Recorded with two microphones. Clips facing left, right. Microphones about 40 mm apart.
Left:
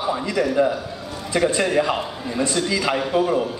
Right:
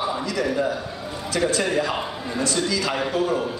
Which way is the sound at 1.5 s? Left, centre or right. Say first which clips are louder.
Left 3 dB; left.